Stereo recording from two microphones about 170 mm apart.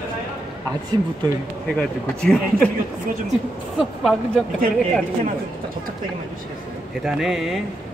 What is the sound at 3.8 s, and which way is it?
Speech, 5° left (ahead or behind).